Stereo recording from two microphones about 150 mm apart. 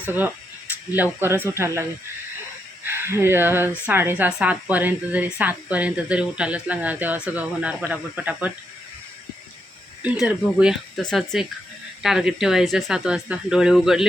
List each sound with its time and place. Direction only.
0.9 s speech: 10° right (ahead or behind)
2.8 s speech: 15° right (ahead or behind)
10.0 s speech: 5° right (ahead or behind)